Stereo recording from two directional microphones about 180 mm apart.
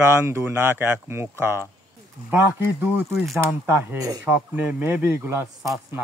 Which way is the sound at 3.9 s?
20° right (ahead or behind).